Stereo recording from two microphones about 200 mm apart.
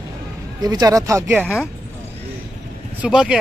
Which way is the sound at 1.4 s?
Centre (ahead or behind).